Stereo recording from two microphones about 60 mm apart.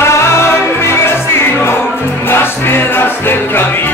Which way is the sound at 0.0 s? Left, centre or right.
Left.